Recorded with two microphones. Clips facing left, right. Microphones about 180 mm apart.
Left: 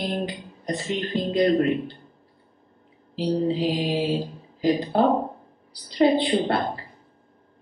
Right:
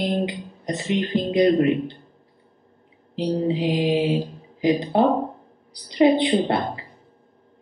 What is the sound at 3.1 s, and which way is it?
A man's voice, 20° right (ahead or behind).